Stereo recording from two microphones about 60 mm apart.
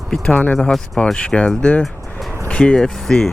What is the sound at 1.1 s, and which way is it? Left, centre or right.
Speech, centre.